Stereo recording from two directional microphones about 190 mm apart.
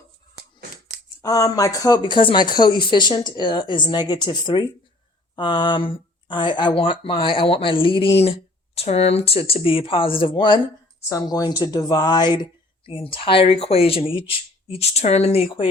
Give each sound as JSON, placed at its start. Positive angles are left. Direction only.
{"t": 1.2, "sound": "speech", "side_deg": 20}